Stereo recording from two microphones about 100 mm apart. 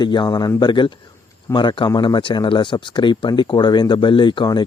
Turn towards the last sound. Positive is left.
turn(degrees=50)  # may be behind; listen again after turning